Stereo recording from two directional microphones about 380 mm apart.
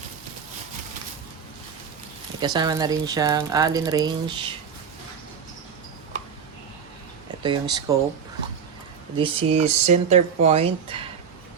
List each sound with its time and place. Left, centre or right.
2.4 s speech: centre
7.4 s speech: centre
9.1 s speech: centre